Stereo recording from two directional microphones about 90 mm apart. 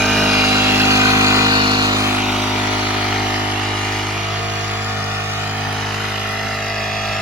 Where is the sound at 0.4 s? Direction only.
25° right (ahead or behind).